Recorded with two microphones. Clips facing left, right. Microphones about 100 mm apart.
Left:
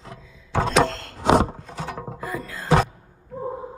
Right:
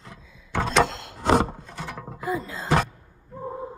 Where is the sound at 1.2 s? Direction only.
5° left (ahead or behind).